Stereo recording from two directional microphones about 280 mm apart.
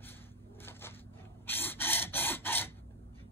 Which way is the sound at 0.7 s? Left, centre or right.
Centre.